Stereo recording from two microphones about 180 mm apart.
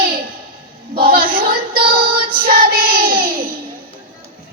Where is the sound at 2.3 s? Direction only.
55° right (ahead or behind).